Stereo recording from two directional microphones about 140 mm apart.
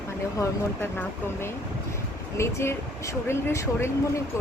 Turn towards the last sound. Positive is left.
turn(degrees=20)  # may be behind; listen again after turning